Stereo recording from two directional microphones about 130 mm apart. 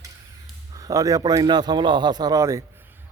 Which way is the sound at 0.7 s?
25° right (ahead or behind).